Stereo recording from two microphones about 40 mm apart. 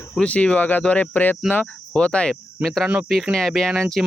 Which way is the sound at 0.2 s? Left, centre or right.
Left.